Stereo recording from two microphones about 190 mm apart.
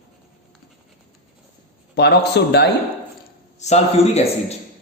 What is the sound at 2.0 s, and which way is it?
Speech, 60° left (ahead or behind).